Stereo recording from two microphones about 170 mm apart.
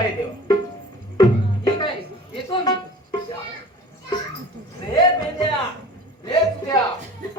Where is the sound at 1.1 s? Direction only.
25° left (ahead or behind).